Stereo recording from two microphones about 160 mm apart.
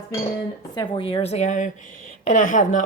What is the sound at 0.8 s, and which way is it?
Speech, 35° left (ahead or behind).